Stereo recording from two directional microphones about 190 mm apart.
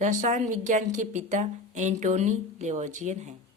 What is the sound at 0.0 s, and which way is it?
A woman's voice, 40° right (ahead or behind).